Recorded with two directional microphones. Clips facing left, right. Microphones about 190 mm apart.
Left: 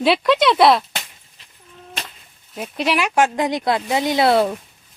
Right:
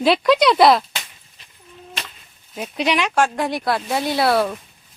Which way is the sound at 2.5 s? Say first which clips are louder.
Even; centre (ahead or behind).